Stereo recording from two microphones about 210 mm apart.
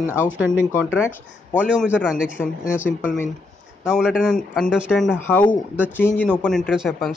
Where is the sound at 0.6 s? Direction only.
10° left (ahead or behind).